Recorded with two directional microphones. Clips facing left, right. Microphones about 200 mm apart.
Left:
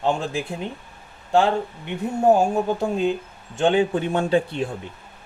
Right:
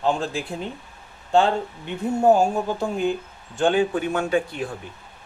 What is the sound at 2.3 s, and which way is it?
A man's voice, 15° left (ahead or behind).